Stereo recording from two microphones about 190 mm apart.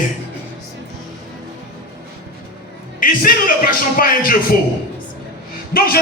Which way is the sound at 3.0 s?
45° left (ahead or behind).